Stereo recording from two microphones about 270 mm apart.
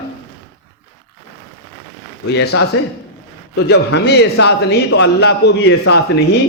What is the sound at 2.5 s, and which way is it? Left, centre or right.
A man's voice, left.